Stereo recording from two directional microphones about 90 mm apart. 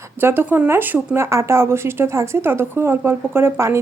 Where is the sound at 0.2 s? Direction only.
25° right (ahead or behind).